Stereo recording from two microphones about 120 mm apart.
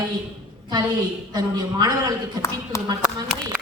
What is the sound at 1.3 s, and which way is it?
Speech, 35° right (ahead or behind).